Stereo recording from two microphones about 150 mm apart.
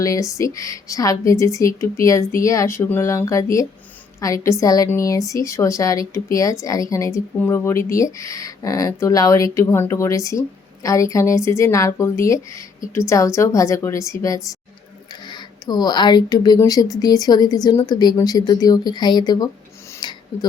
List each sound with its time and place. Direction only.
0.0 s speech: 20° left (ahead or behind)
20.0 s filing: 30° left (ahead or behind)